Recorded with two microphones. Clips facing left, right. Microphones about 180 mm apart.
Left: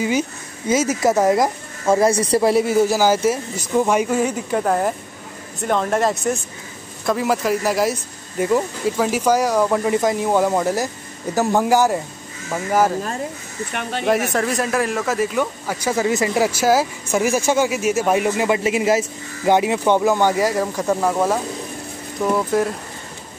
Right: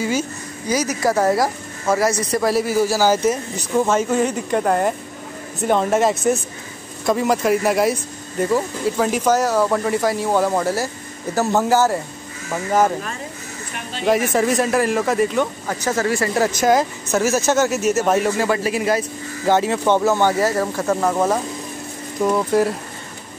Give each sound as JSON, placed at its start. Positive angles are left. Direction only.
{"t": 0.7, "sound": "speech", "side_deg": 25}
{"t": 2.0, "sound": "speech", "side_deg": 30}
{"t": 14.0, "sound": "speech", "side_deg": 0}
{"t": 22.2, "sound": "speech", "side_deg": -15}